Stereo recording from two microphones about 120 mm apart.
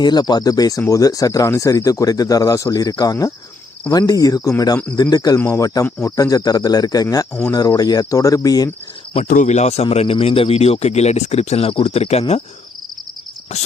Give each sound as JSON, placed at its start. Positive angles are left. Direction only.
{"t": 0.0, "sound": "speech", "side_deg": 35}
{"t": 9.2, "sound": "speech", "side_deg": 90}